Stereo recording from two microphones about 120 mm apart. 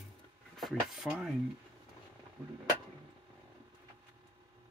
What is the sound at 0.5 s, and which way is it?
Speech, centre (ahead or behind).